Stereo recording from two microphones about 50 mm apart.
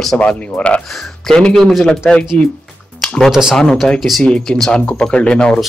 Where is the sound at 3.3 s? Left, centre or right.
Centre.